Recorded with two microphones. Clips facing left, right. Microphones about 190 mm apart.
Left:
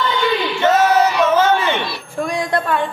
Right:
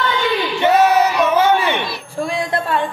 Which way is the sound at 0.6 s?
15° right (ahead or behind).